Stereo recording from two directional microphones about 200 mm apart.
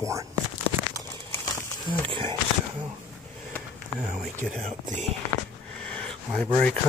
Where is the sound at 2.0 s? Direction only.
25° right (ahead or behind).